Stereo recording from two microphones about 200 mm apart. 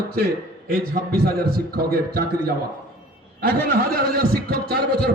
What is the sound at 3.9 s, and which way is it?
A man's voice, 50° right (ahead or behind).